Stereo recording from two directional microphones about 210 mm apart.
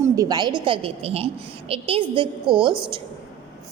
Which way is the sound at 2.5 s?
Centre (ahead or behind).